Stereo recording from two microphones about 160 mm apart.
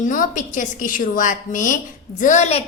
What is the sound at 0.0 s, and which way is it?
A woman's voice, 55° left (ahead or behind).